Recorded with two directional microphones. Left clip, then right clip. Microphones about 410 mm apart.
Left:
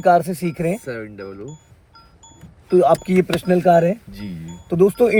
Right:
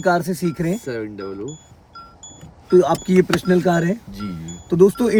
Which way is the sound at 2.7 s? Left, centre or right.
Left.